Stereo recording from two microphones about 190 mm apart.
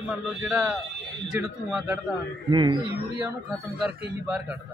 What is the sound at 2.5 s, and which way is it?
Speech, 25° right (ahead or behind).